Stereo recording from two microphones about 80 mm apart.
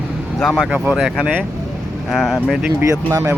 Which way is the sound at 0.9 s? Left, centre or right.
Centre.